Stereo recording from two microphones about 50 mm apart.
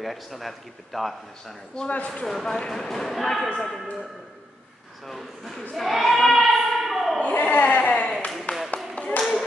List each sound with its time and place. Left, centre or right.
0.0 s a man's voice: centre
1.8 s speech: centre
5.0 s a man's voice: centre
5.8 s a sound: centre
7.2 s a sound: left
8.9 s clapping: left